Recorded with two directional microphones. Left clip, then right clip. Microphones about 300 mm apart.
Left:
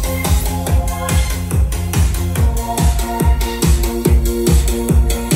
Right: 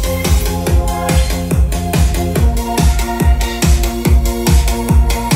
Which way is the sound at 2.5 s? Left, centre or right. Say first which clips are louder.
Right 3 dB; centre.